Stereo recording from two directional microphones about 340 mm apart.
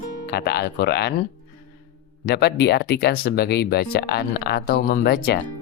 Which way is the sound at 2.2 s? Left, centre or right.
Left.